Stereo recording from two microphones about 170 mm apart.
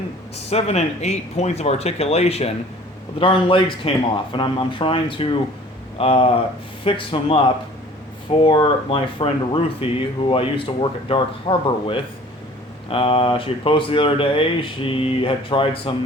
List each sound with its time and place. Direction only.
0.5 s speech: 40° left (ahead or behind)